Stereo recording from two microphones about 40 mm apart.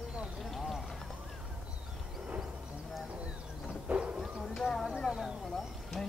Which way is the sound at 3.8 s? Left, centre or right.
Right.